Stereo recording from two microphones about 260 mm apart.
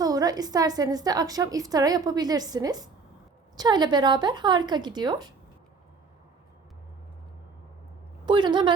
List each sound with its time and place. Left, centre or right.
0.0 s a woman's voice: centre
8.2 s a woman's voice: centre